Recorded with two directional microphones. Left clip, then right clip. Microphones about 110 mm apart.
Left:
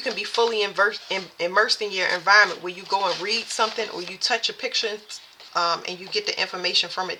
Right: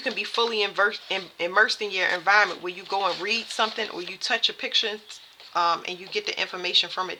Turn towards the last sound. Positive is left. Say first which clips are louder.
# left 1 dB
turn(degrees=-30)  # may be behind; listen again after turning